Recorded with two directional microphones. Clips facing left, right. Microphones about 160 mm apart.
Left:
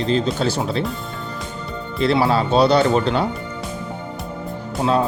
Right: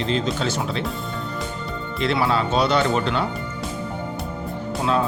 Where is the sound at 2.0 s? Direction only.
35° left (ahead or behind).